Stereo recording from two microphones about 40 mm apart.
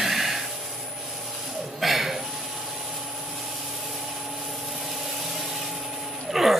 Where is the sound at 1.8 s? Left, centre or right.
Centre.